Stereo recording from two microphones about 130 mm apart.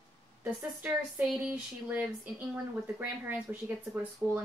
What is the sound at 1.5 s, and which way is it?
Speech, 15° right (ahead or behind).